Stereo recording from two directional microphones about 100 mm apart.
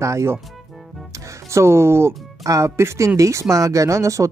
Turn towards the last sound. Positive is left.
turn(degrees=-30)  # may be behind; listen again after turning